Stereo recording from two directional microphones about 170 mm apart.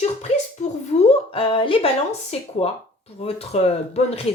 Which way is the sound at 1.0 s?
30° left (ahead or behind).